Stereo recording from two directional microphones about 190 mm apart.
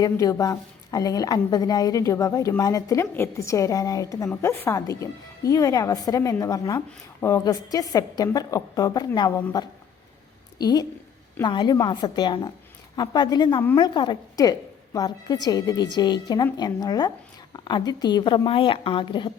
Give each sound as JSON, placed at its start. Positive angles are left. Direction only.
{"t": 0.0, "sound": "a woman's voice", "side_deg": 20}
{"t": 10.6, "sound": "a woman's voice", "side_deg": 20}